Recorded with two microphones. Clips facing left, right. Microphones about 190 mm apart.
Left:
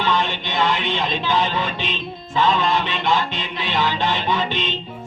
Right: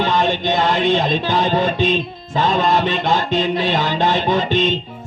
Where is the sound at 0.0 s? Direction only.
45° right (ahead or behind).